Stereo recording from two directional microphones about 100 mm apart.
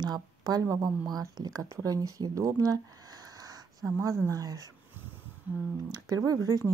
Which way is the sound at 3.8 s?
30° right (ahead or behind).